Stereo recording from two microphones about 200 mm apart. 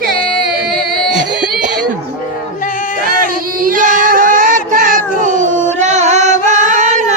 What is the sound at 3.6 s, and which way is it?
Child singing, 45° right (ahead or behind).